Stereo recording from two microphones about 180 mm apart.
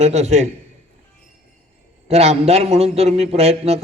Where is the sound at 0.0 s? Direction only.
35° right (ahead or behind).